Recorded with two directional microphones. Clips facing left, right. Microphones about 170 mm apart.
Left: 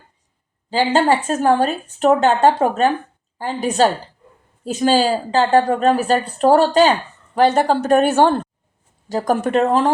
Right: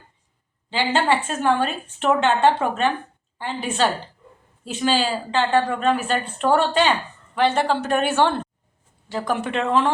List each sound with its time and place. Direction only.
0.7 s a woman's voice: 40° left (ahead or behind)